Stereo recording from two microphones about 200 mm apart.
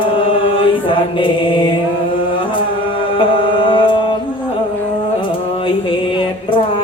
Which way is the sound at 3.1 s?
25° left (ahead or behind).